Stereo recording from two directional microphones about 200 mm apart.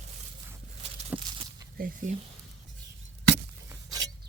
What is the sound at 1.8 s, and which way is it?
Speech, 40° right (ahead or behind).